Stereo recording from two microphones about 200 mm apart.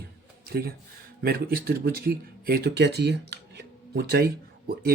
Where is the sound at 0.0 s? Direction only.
50° right (ahead or behind).